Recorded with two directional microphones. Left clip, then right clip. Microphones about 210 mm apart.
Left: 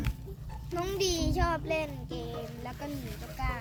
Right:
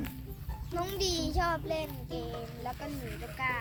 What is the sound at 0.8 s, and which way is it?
Child singing, 35° left (ahead or behind).